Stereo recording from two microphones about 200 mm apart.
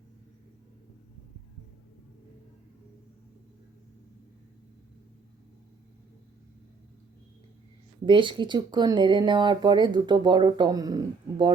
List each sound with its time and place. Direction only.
8.0 s speech: 25° right (ahead or behind)